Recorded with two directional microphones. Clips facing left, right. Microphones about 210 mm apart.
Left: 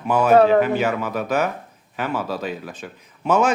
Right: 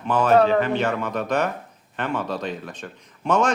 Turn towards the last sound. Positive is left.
turn(degrees=5)  # may be behind; listen again after turning